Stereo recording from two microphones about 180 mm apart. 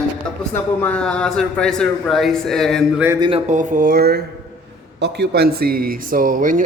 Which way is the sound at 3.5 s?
45° right (ahead or behind).